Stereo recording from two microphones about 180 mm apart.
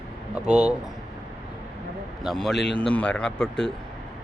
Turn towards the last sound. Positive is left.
turn(degrees=5)  # may be behind; listen again after turning